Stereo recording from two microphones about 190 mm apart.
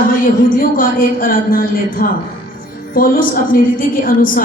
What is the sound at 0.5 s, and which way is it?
A woman's voice, 45° left (ahead or behind).